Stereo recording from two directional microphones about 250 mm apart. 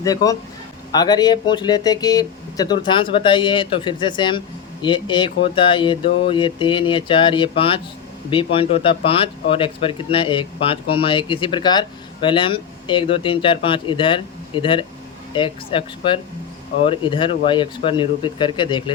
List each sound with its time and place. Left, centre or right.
0.0 s speech: centre